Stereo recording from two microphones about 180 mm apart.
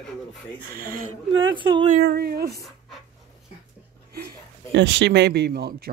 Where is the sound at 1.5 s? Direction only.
25° right (ahead or behind).